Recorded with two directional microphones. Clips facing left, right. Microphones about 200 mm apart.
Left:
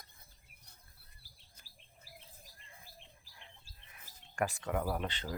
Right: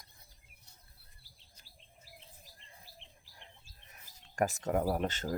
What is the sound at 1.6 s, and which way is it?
Chirp, 50° left (ahead or behind).